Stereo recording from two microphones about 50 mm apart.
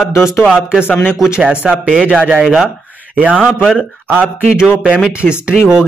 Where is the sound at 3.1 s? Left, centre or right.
Right.